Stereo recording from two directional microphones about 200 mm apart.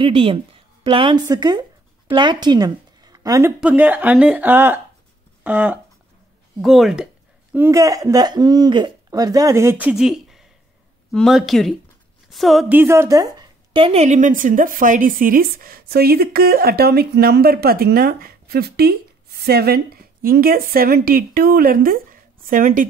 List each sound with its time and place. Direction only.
0.0 s a woman's voice: 25° right (ahead or behind); by 7.1 s centre (ahead or behind)
7.5 s a woman's voice: 15° right (ahead or behind); by 22.8 s 45° right (ahead or behind)